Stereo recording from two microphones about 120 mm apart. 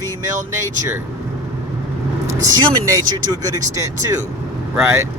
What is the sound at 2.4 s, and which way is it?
Speech, 30° right (ahead or behind).